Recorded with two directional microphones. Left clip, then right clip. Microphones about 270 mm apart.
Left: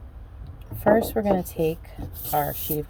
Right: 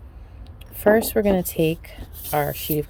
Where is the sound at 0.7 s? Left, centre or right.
Right.